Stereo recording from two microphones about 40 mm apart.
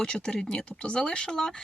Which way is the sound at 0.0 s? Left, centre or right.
Centre.